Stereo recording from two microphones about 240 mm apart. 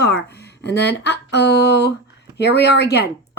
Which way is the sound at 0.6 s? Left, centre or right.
Left.